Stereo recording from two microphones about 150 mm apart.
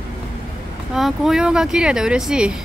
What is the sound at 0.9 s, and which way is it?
Speech, centre (ahead or behind).